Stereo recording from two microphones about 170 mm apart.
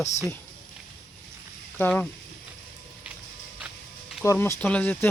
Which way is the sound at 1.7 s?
10° left (ahead or behind).